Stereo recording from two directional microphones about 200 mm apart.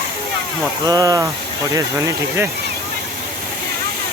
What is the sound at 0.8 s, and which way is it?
Speech, 20° right (ahead or behind).